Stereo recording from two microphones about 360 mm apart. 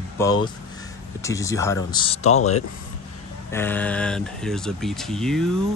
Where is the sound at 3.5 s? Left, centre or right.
Centre.